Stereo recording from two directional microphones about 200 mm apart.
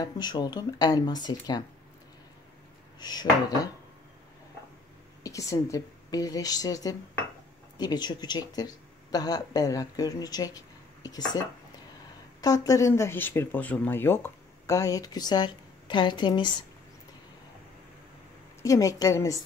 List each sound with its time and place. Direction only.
0.0 s speech: 20° left (ahead or behind)
3.0 s speech: 20° left (ahead or behind)
5.2 s speech: 15° left (ahead or behind)
12.4 s speech: 20° left (ahead or behind)
18.6 s speech: 15° left (ahead or behind)